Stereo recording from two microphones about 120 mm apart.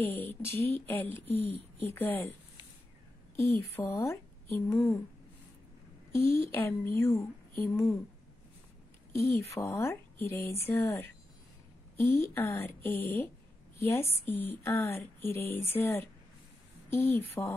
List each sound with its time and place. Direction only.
0.0 s speech: 15° left (ahead or behind)
3.3 s speech: 20° left (ahead or behind)
6.1 s speech: 20° left (ahead or behind)
9.1 s speech: 20° left (ahead or behind)